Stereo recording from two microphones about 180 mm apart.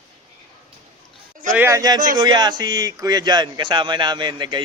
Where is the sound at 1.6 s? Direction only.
15° right (ahead or behind).